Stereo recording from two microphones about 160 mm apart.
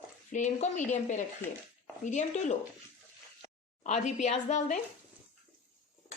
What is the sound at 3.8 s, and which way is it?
Speech, 50° left (ahead or behind).